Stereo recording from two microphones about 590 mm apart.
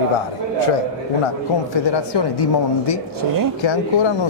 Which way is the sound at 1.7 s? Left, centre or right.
Left.